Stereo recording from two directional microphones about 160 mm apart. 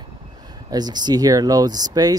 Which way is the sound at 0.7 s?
25° right (ahead or behind).